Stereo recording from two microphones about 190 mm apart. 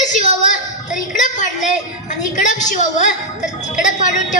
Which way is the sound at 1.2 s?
40° left (ahead or behind).